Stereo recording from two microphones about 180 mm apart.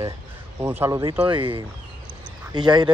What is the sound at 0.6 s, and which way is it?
Speech, 15° right (ahead or behind).